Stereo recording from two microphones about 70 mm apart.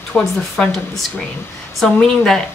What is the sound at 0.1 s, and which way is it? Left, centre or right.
Speech, left.